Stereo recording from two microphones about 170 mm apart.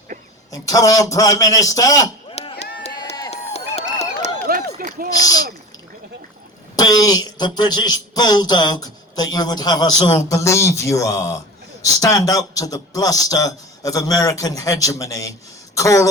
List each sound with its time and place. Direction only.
0.5 s a man's voice: 20° left (ahead or behind)
2.3 s chop: 35° left (ahead or behind)
2.9 s run: 25° left (ahead or behind)
3.5 s a sound: 40° left (ahead or behind)
4.4 s run: 55° right (ahead or behind)
6.7 s a man's voice: 20° left (ahead or behind)
15.7 s a sound: 20° left (ahead or behind)